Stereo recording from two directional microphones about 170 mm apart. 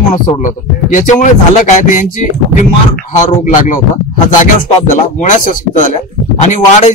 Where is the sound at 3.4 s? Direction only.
50° left (ahead or behind).